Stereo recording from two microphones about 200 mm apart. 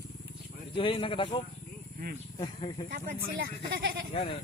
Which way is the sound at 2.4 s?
20° left (ahead or behind).